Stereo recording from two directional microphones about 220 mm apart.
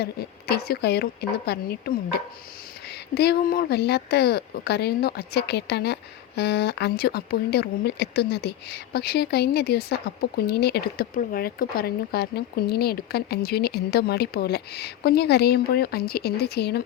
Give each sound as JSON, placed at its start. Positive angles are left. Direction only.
{"t": 0.0, "sound": "speech", "side_deg": 45}
{"t": 3.2, "sound": "speech", "side_deg": 45}